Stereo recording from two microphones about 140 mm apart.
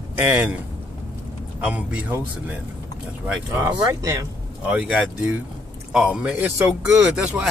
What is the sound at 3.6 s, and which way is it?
Speech, 25° right (ahead or behind).